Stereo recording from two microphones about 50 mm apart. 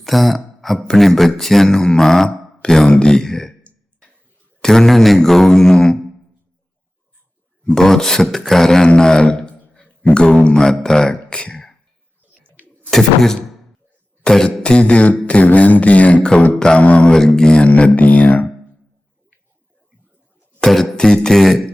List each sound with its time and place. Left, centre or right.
0.0 s a sound: centre
0.9 s mantra: centre
4.6 s mantra: centre
7.8 s mantra: centre
8.9 s speech: centre
12.9 s speech: centre
14.3 s mantra: centre
14.6 s speech: left
16.6 s mantra: centre
16.8 s speech: left
17.2 s mantra: centre
17.7 s speech: left
20.9 s mantra: centre